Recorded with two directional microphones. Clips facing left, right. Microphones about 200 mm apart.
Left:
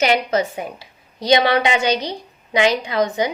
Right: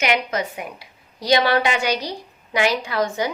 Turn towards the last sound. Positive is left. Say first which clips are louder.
# left 3 dB
turn(degrees=20)  # may be behind; listen again after turning